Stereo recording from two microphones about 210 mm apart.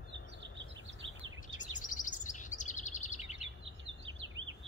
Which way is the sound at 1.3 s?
40° left (ahead or behind).